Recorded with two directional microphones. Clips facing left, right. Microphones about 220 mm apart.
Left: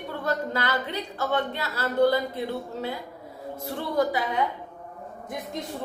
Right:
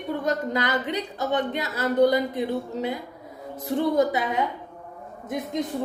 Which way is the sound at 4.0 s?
20° right (ahead or behind).